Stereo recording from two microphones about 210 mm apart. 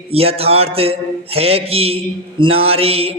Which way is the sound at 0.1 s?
30° right (ahead or behind).